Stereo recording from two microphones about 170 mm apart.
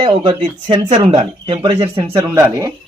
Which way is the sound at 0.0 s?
30° right (ahead or behind).